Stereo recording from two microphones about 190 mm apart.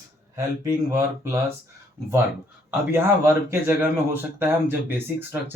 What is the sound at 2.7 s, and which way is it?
Speech, 10° right (ahead or behind).